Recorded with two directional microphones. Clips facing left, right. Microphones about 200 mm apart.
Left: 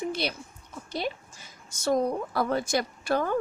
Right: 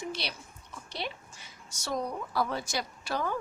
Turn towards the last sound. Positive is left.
turn(degrees=50)  # may be behind; listen again after turning